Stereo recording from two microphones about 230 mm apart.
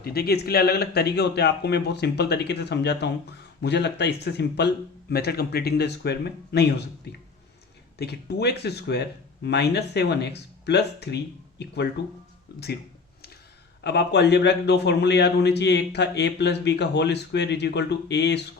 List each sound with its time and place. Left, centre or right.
0.0 s speech: left
13.8 s speech: left